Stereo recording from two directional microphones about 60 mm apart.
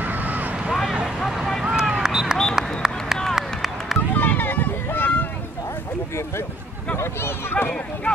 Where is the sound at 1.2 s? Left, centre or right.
Centre.